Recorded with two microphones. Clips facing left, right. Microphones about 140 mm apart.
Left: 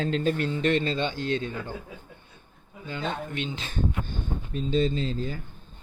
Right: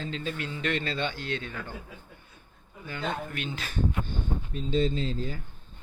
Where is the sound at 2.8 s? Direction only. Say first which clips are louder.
Left 1 dB; 25° left (ahead or behind).